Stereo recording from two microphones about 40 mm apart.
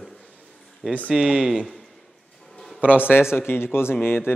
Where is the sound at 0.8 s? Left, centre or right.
Right.